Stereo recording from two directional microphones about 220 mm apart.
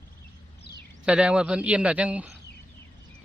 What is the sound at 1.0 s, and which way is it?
Speech, 5° right (ahead or behind).